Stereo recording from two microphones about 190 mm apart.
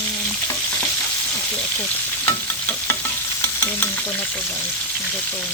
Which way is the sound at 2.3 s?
10° left (ahead or behind).